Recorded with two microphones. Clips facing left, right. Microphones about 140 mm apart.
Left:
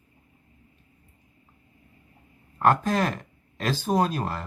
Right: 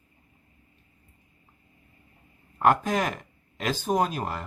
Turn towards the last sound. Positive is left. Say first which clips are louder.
# left 2 dB
turn(degrees=-15)  # may be behind; listen again after turning